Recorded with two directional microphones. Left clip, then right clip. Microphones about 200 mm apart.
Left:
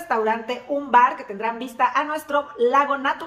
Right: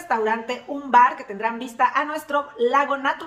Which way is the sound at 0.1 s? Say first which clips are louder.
Even; 5° right (ahead or behind).